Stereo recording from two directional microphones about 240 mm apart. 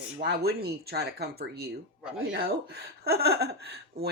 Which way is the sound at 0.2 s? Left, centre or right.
Right.